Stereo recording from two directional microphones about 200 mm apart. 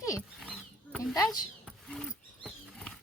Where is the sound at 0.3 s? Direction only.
Centre (ahead or behind).